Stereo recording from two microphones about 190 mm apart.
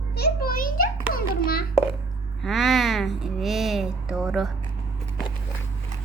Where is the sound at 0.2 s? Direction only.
55° left (ahead or behind).